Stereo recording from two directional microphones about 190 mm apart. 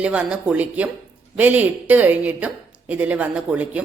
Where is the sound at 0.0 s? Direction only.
5° right (ahead or behind).